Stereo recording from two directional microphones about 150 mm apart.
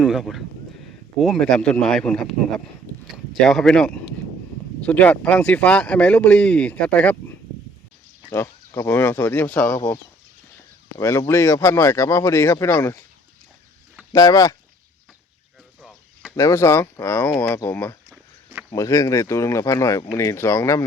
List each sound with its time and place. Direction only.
0.0 s speech: centre (ahead or behind)
3.4 s speech: 5° left (ahead or behind)
8.3 s speech: 15° left (ahead or behind)
14.1 s speech: 25° left (ahead or behind)
15.8 s a sound: centre (ahead or behind)
16.3 s speech: 20° left (ahead or behind)